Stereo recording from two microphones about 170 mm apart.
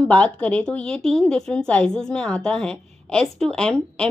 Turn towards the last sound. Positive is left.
turn(degrees=5)  # may be behind; listen again after turning